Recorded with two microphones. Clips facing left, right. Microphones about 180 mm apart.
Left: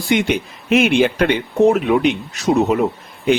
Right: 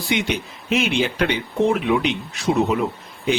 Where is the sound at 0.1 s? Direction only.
50° left (ahead or behind).